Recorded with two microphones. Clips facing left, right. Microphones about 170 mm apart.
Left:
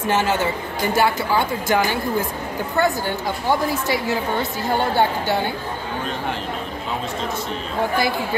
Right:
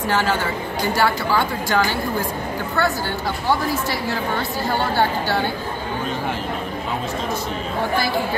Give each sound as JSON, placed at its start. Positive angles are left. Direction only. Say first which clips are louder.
{"t": 0.0, "sound": "a woman's voice", "louder": "left 1 dB", "side_deg": 20}